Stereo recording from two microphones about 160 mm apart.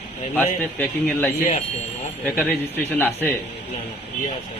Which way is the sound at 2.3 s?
10° left (ahead or behind).